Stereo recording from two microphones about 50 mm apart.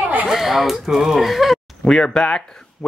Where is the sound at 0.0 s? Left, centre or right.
Right.